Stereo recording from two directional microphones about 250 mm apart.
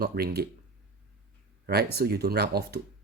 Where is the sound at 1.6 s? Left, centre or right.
Right.